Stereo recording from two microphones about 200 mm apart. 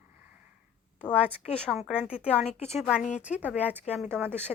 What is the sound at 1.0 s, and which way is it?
A woman's voice, 5° left (ahead or behind).